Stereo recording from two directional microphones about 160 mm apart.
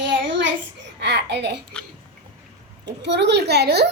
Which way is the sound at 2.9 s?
90° right.